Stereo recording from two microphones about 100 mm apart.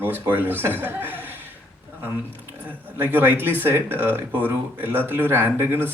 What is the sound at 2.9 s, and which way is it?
Speech, 20° right (ahead or behind).